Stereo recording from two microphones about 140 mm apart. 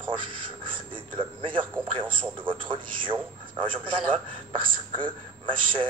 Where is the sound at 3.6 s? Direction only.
35° right (ahead or behind).